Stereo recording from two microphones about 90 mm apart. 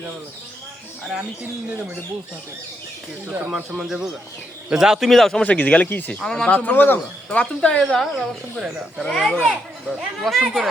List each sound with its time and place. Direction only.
3.2 s speech: 15° right (ahead or behind)
3.8 s speech: 5° right (ahead or behind)
5.4 s speech: 15° left (ahead or behind)
6.2 s speech: 5° left (ahead or behind)
7.3 s speech: 10° left (ahead or behind); by 10.7 s 5° right (ahead or behind)